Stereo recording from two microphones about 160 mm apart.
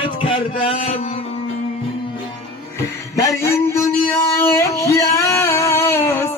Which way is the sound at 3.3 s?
15° left (ahead or behind).